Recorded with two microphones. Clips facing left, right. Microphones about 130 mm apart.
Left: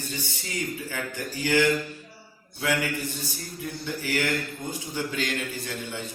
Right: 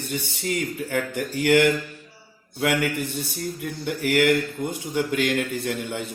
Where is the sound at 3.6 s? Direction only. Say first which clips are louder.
Right 3 dB; 60° right (ahead or behind).